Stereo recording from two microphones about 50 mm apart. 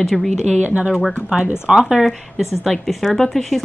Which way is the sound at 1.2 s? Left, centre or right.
Centre.